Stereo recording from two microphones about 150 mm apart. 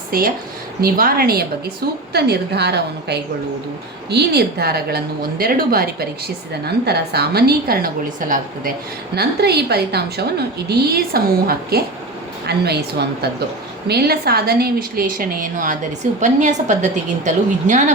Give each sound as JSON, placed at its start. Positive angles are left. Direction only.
{"t": 0.1, "sound": "a woman's voice", "side_deg": -75}
{"t": 9.1, "sound": "a woman's voice", "side_deg": -90}